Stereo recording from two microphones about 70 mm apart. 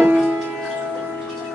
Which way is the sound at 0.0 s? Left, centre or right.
Right.